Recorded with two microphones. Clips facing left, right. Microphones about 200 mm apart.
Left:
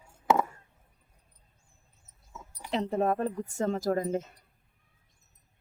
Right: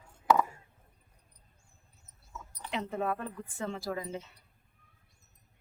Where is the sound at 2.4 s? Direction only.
10° left (ahead or behind).